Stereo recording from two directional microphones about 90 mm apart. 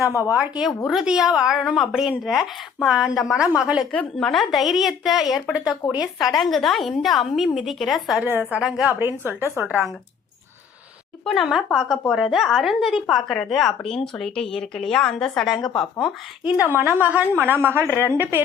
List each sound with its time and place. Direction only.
0.3 s a woman's voice: 10° right (ahead or behind)
3.9 s a woman's voice: 5° left (ahead or behind)
8.2 s a woman's voice: 20° right (ahead or behind)
9.0 s a woman's voice: 25° right (ahead or behind)
11.3 s a woman's voice: centre (ahead or behind)
16.0 s a woman's voice: 10° right (ahead or behind); by 18.4 s 25° right (ahead or behind)